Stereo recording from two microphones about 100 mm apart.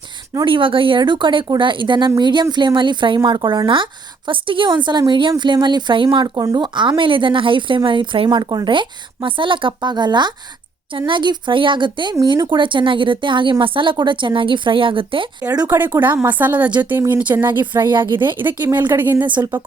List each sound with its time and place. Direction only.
0.4 s speech: 60° right (ahead or behind)
15.6 s speech: 20° right (ahead or behind)